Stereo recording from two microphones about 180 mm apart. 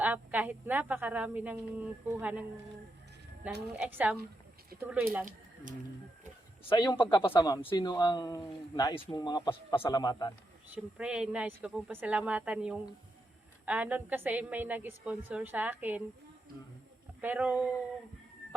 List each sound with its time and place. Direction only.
0.0 s a woman's voice: 10° right (ahead or behind)
6.7 s speech: 25° left (ahead or behind)
10.9 s a woman's voice: 5° right (ahead or behind)
17.2 s a woman's voice: 10° right (ahead or behind)